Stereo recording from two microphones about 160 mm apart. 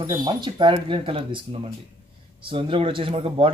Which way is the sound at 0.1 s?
30° right (ahead or behind).